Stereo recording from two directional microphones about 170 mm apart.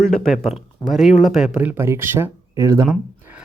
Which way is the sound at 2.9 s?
5° right (ahead or behind).